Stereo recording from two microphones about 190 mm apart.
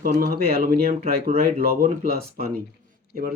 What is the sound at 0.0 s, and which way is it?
Speech, 45° right (ahead or behind).